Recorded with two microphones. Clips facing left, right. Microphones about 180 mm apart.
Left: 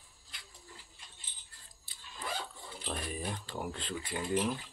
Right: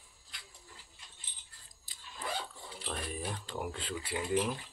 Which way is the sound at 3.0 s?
5° right (ahead or behind).